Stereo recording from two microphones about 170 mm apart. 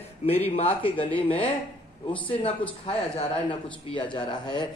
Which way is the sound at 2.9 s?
30° left (ahead or behind).